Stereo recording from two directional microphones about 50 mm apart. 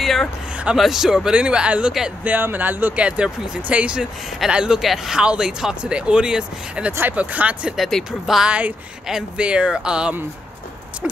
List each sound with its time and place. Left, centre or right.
0.0 s a sound: centre
0.7 s speech: centre
1.3 s speech: right
2.4 s speech: right
3.0 s speech: right
7.2 s speech: right
7.7 s speech: centre
8.5 s speech: right
9.1 s speech: centre
9.4 s speech: right